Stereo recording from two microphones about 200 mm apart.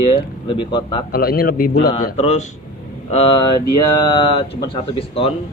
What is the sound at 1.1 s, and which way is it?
Speech, 50° left (ahead or behind).